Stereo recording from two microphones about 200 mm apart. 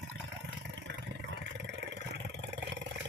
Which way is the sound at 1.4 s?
60° right (ahead or behind).